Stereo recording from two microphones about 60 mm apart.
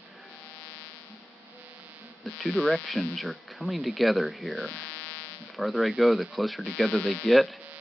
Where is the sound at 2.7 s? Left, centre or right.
Centre.